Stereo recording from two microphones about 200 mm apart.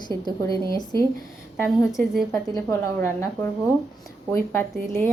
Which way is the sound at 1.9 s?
Centre (ahead or behind).